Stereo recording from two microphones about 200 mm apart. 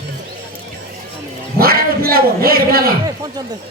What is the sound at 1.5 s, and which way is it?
A man's voice, 50° right (ahead or behind).